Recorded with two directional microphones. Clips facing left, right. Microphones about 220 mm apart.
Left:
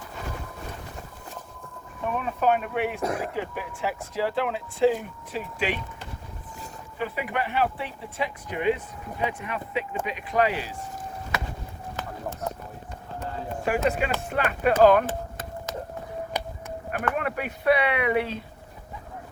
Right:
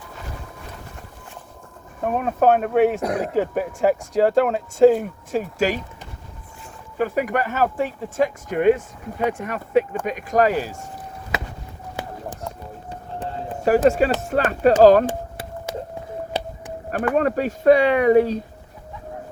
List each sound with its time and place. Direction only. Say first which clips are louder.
2.0 s speech: right 6 dB; 45° right (ahead or behind)
7.0 s speech: right 8 dB; 45° right (ahead or behind)
13.7 s speech: right 9 dB; 40° right (ahead or behind)
15.0 s a sound: right 5 dB; 10° right (ahead or behind)
17.2 s speech: right 9 dB; 40° right (ahead or behind)